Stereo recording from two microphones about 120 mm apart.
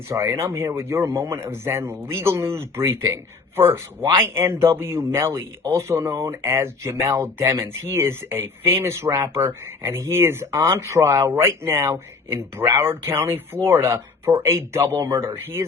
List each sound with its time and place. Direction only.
0.1 s speech: 25° right (ahead or behind)